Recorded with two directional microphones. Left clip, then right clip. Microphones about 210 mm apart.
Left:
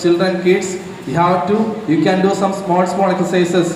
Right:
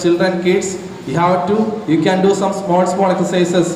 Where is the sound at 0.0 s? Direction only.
20° right (ahead or behind).